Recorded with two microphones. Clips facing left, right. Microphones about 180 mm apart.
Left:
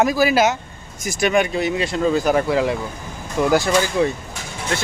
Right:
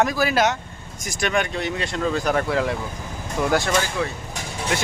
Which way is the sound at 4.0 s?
20° left (ahead or behind).